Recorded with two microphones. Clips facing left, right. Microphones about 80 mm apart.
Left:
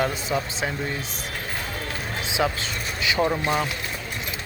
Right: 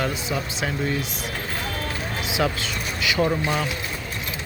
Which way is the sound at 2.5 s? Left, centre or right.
Left.